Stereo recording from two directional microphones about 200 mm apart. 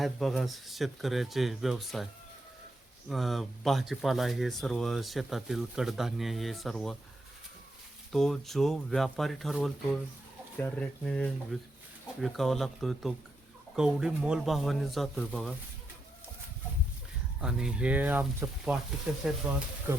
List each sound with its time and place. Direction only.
0.0 s speech: centre (ahead or behind)
3.1 s speech: centre (ahead or behind)
8.1 s speech: centre (ahead or behind)
17.4 s speech: 5° right (ahead or behind)